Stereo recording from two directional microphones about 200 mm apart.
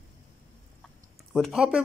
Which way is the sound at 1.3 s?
Centre (ahead or behind).